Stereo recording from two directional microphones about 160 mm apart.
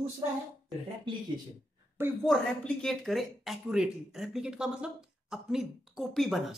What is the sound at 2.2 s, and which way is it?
Speech, centre (ahead or behind).